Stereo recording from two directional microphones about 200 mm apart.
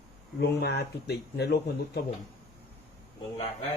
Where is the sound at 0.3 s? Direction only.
55° left (ahead or behind).